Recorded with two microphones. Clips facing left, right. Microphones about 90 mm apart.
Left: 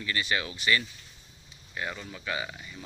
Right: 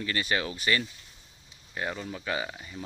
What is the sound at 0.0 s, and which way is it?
Speech, 40° right (ahead or behind).